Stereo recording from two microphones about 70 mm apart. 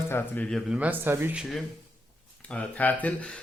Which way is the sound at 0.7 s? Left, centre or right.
Centre.